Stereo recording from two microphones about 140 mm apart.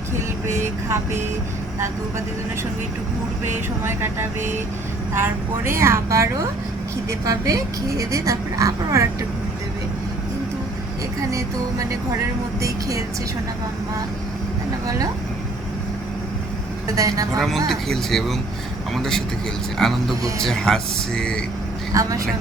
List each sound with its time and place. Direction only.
3.8 s a woman's voice: 15° right (ahead or behind)
14.8 s a woman's voice: 25° right (ahead or behind)
16.9 s a woman's voice: 25° right (ahead or behind)
17.7 s speech: centre (ahead or behind)
19.8 s speech: 5° left (ahead or behind)